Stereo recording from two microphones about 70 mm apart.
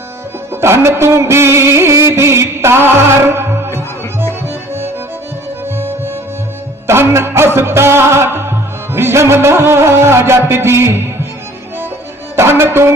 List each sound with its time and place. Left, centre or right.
0.5 s music: right
12.4 s music: right